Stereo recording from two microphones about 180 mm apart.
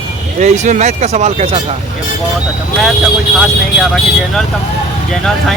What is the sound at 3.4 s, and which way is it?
Speech, centre (ahead or behind).